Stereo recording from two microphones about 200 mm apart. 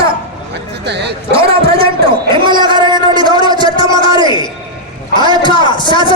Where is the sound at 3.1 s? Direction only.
25° left (ahead or behind).